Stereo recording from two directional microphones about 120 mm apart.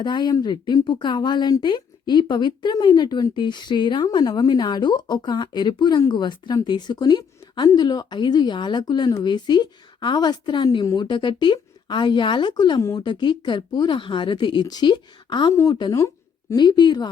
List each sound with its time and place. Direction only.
0.0 s speech: 40° left (ahead or behind)
12.8 s speech: 25° left (ahead or behind)
13.1 s speech: 40° left (ahead or behind)